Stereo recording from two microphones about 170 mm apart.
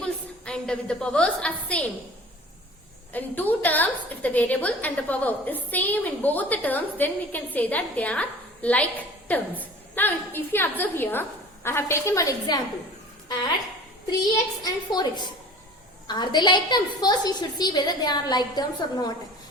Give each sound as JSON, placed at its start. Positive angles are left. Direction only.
{"t": 0.0, "sound": "a woman's voice", "side_deg": 5}
{"t": 3.1, "sound": "a woman's voice", "side_deg": 10}
{"t": 14.2, "sound": "a woman's voice", "side_deg": 25}